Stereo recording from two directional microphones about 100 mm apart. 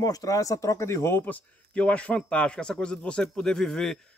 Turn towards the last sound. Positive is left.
turn(degrees=5)  # may be behind; listen again after turning